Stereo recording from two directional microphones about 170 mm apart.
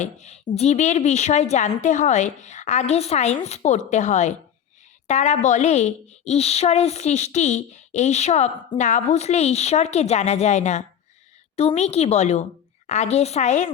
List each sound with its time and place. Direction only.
0.0 s a woman's voice: 40° left (ahead or behind)